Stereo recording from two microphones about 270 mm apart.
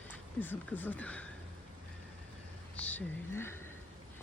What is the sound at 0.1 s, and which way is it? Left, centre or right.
Speech, centre.